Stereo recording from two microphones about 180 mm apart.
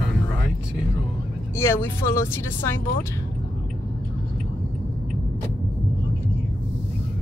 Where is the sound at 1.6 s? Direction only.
15° left (ahead or behind).